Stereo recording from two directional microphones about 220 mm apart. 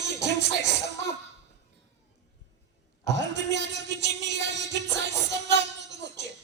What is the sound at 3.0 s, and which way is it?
Music, 50° right (ahead or behind).